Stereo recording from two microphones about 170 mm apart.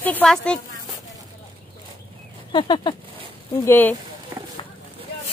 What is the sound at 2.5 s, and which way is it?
Speech, 25° left (ahead or behind).